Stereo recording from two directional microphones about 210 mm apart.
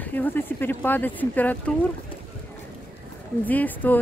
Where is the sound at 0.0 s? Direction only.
10° left (ahead or behind).